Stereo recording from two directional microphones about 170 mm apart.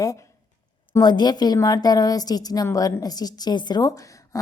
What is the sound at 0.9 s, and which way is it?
Speech, 25° left (ahead or behind).